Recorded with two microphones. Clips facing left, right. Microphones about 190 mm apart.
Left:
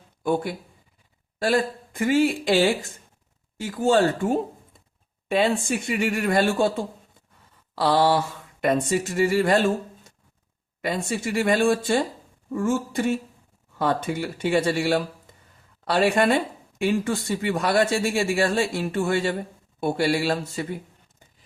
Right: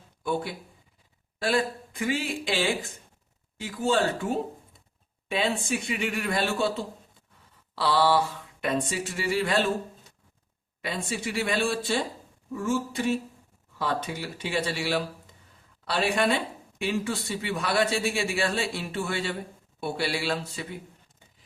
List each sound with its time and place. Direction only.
0.2 s speech: 50° left (ahead or behind)
5.3 s speech: 50° left (ahead or behind)
10.8 s speech: 45° left (ahead or behind)